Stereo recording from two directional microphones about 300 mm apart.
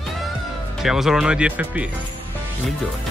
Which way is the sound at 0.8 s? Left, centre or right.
Centre.